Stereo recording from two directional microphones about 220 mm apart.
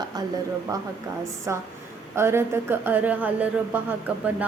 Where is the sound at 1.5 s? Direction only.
10° right (ahead or behind).